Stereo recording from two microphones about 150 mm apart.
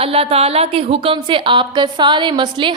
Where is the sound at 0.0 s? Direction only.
40° right (ahead or behind).